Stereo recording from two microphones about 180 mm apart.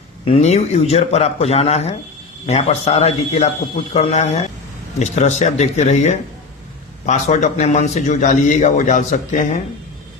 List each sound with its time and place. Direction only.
0.3 s a man's voice: 35° left (ahead or behind)